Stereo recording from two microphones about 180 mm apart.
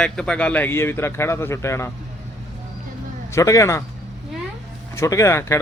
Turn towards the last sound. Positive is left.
turn(degrees=15)  # may be behind; listen again after turning